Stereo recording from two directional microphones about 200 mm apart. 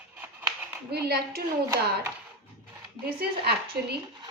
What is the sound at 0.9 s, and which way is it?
Speech, 55° right (ahead or behind).